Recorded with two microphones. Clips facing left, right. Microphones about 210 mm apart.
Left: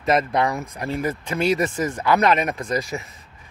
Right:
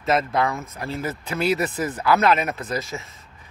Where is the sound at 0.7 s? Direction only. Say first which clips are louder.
Left 3 dB; centre (ahead or behind).